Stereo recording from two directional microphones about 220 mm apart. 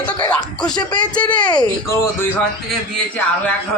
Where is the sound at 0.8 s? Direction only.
20° left (ahead or behind).